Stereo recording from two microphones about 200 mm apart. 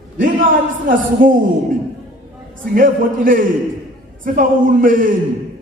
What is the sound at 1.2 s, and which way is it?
Speech, 45° right (ahead or behind).